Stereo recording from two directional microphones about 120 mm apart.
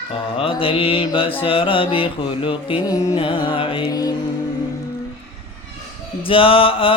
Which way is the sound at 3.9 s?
30° left (ahead or behind).